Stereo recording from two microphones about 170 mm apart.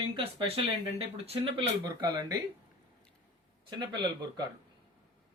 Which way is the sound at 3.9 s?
25° right (ahead or behind).